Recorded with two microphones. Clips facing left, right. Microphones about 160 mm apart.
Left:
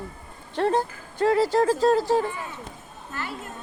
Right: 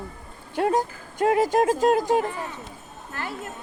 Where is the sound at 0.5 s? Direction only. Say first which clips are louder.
Even; 10° right (ahead or behind).